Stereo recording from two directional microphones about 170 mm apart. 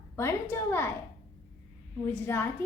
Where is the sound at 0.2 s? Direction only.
15° left (ahead or behind).